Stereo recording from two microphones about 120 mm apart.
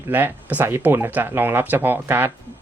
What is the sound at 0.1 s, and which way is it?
Speech, 15° right (ahead or behind).